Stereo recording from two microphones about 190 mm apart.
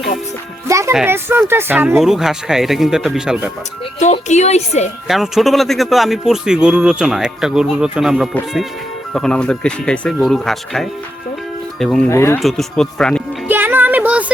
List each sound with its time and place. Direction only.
0.7 s a child's voice: 15° right (ahead or behind)
4.0 s a woman's voice: 35° left (ahead or behind)
5.0 s a man's voice: centre (ahead or behind)
12.0 s speech: 15° left (ahead or behind)
12.4 s a man's voice: centre (ahead or behind)
13.5 s music: 10° right (ahead or behind)